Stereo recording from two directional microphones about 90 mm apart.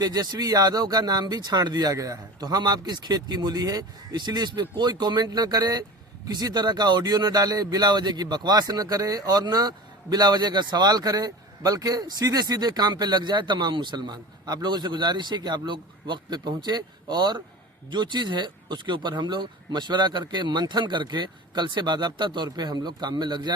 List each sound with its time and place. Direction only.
0.0 s speech: 45° right (ahead or behind)